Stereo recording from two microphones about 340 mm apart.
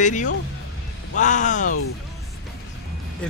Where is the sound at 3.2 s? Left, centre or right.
Centre.